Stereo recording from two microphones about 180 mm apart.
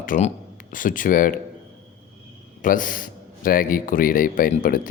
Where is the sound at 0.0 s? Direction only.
50° left (ahead or behind).